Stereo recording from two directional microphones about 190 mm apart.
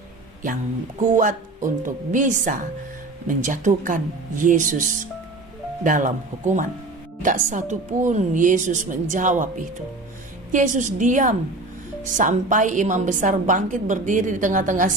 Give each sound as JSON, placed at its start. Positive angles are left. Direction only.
{"t": 1.1, "sound": "a woman's voice", "side_deg": -45}